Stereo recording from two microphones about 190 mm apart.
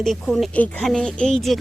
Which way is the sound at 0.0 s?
Centre (ahead or behind).